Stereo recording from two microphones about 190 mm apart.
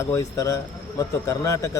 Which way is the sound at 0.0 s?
15° left (ahead or behind).